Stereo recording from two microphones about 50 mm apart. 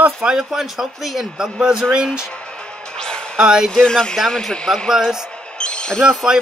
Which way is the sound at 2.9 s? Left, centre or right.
Centre.